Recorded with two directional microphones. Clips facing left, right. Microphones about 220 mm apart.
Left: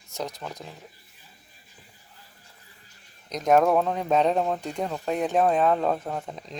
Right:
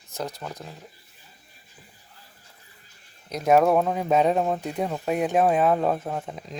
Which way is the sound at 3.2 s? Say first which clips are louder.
Right 1 dB; 5° right (ahead or behind).